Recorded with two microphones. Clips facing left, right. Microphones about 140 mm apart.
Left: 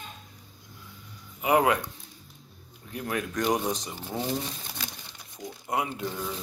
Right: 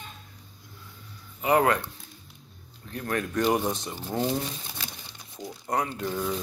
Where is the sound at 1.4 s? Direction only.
10° left (ahead or behind).